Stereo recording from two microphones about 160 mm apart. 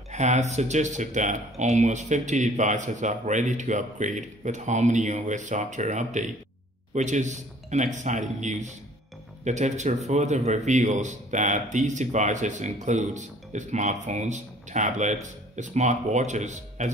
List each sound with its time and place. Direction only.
0.1 s a man's voice: 45° right (ahead or behind)